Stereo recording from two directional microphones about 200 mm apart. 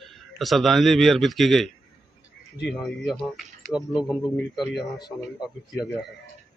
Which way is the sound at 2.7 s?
Centre (ahead or behind).